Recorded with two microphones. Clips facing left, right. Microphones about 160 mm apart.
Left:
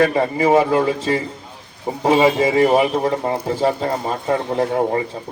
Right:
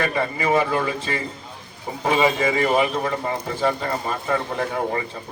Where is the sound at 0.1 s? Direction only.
40° left (ahead or behind).